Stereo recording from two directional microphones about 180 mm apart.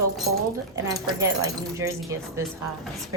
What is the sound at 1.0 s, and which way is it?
Speech, 20° right (ahead or behind).